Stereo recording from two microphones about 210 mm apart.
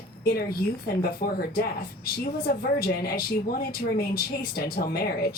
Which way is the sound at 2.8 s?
45° left (ahead or behind).